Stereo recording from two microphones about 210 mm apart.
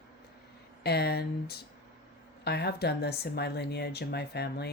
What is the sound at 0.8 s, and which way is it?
Speech, 50° left (ahead or behind).